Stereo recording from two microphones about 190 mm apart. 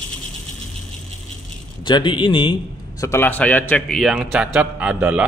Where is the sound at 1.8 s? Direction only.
25° left (ahead or behind).